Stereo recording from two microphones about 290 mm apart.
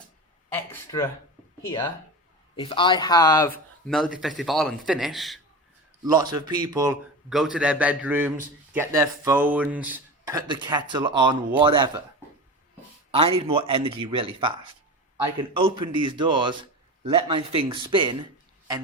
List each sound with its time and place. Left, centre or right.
0.5 s speech: centre
3.8 s a man's voice: centre
6.1 s speech: centre
7.3 s a man's voice: centre
13.1 s speech: centre